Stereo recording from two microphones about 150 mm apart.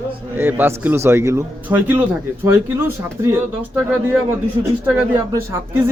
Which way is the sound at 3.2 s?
15° right (ahead or behind).